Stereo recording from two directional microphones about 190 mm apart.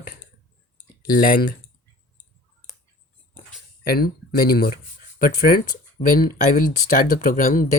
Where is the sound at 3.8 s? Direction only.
55° left (ahead or behind).